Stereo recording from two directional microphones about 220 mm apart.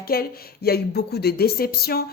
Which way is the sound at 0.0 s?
45° left (ahead or behind).